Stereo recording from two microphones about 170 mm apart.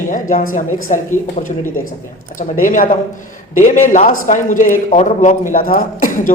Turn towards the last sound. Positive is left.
turn(degrees=55)  # may be behind; listen again after turning